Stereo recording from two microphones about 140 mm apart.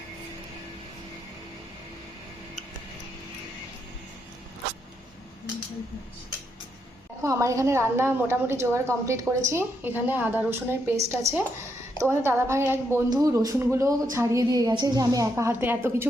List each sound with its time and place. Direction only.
7.2 s a woman's voice: 20° right (ahead or behind)